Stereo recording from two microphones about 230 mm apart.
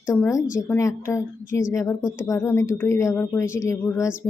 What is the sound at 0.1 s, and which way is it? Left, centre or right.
A woman's voice, centre.